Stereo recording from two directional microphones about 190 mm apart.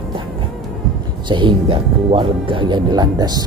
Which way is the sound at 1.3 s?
25° right (ahead or behind).